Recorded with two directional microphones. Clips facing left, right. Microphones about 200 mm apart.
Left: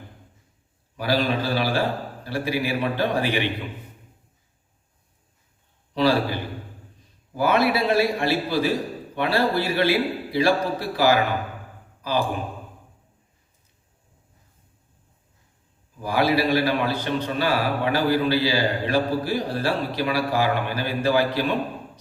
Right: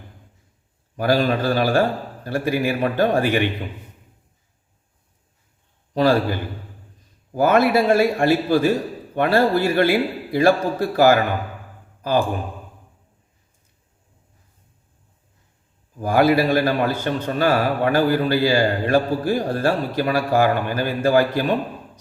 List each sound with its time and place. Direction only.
0.9 s a man's voice: 50° right (ahead or behind)
5.9 s a man's voice: 45° right (ahead or behind)
16.0 s a man's voice: 50° right (ahead or behind)